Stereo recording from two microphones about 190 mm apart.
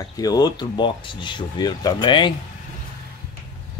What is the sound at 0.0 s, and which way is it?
Speech, 20° left (ahead or behind).